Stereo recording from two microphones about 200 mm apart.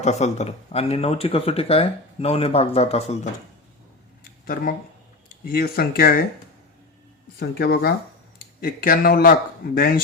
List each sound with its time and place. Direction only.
0.0 s speech: 35° left (ahead or behind)
4.2 s a sound: 45° left (ahead or behind)
5.5 s speech: 50° left (ahead or behind)
7.3 s speech: 55° left (ahead or behind)